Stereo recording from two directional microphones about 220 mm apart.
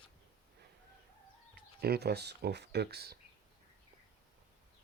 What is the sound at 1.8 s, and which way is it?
Speech, 45° right (ahead or behind).